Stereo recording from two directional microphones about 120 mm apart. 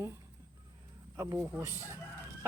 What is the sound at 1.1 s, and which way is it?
Speech, 25° right (ahead or behind).